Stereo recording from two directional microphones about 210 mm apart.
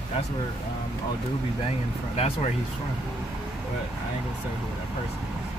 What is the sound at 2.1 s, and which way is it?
Speech, 30° left (ahead or behind).